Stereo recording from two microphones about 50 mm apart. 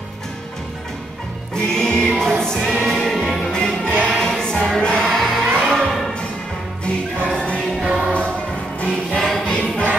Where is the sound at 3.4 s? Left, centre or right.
Centre.